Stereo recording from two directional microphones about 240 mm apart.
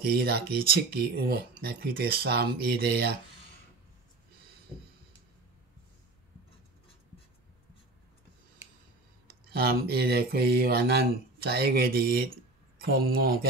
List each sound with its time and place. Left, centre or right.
0.1 s speech: right
9.3 s speech: right